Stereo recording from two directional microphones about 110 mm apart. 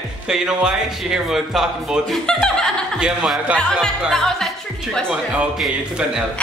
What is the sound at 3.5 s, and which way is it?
Speech, 5° left (ahead or behind).